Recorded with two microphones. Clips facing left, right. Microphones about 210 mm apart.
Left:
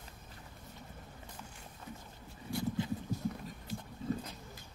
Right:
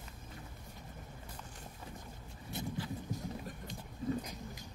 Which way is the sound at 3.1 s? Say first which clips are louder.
Left 1 dB; 20° right (ahead or behind).